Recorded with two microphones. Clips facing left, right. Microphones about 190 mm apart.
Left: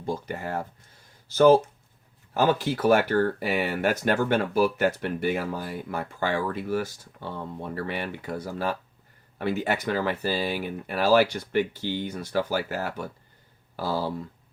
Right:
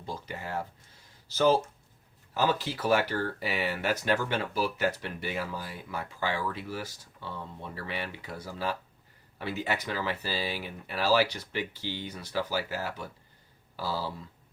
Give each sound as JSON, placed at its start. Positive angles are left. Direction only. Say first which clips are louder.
{"t": 0.0, "sound": "speech", "louder": "left 7 dB", "side_deg": 50}